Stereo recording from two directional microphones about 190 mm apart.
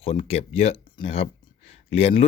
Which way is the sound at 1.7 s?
30° left (ahead or behind).